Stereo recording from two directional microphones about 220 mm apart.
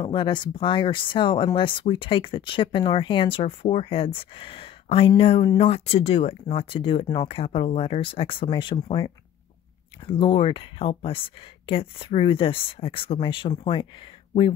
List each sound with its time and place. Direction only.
0.0 s speech: 20° left (ahead or behind)